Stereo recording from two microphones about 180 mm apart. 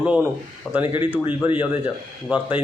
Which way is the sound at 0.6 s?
5° left (ahead or behind).